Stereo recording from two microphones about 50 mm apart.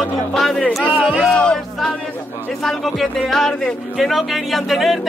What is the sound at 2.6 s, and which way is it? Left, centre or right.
Speech, centre.